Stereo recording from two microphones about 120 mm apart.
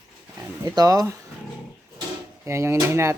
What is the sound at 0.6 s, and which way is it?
Speech, 30° right (ahead or behind).